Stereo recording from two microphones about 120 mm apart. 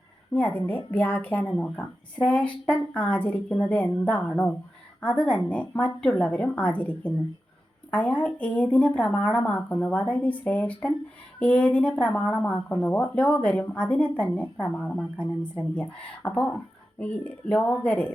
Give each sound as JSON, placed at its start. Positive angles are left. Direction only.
{"t": 0.3, "sound": "speech", "side_deg": 15}